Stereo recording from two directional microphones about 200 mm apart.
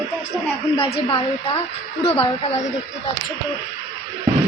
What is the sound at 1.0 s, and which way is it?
A woman's voice, 25° left (ahead or behind).